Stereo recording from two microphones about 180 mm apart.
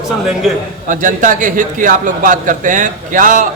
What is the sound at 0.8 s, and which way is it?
A man's voice, 45° right (ahead or behind).